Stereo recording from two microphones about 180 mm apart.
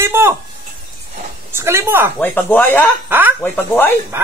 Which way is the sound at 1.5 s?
15° right (ahead or behind).